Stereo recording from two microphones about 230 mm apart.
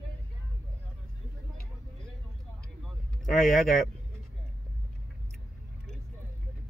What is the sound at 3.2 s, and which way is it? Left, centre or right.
Speech, centre.